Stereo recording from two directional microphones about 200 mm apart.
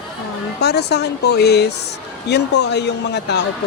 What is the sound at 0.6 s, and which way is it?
Speech, 55° left (ahead or behind).